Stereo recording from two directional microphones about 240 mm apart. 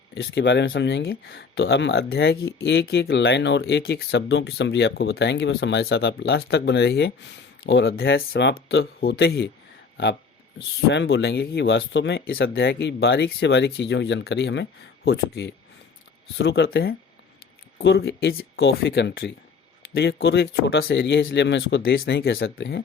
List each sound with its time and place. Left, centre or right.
0.1 s speech: left
10.8 s speech: left